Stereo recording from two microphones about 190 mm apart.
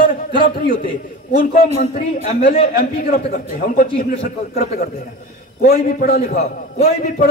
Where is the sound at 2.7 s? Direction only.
50° left (ahead or behind).